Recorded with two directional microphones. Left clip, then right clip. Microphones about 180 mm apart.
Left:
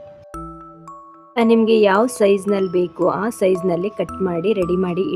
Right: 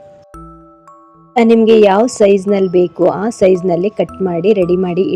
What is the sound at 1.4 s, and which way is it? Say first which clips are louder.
A woman's voice: right 6 dB; 20° right (ahead or behind).